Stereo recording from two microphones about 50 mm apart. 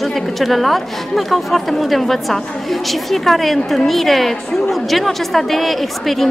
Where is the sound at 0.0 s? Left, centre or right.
Centre.